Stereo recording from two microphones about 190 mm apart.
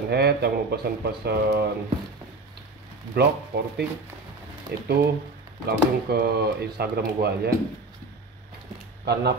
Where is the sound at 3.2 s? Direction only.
55° right (ahead or behind).